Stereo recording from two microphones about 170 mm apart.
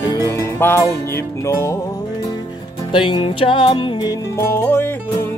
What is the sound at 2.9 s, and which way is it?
Music, 30° left (ahead or behind).